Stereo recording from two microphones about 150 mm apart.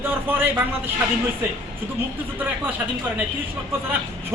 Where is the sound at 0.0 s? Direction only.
15° right (ahead or behind).